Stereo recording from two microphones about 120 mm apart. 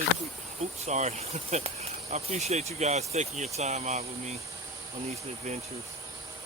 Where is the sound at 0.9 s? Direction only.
65° right (ahead or behind).